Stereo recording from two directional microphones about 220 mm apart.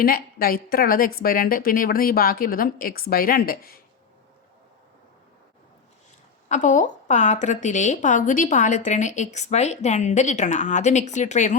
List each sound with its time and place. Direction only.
0.0 s a woman's voice: 40° left (ahead or behind)
6.5 s a woman's voice: 35° left (ahead or behind)